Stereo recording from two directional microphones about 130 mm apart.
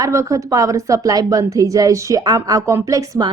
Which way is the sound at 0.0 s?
25° right (ahead or behind).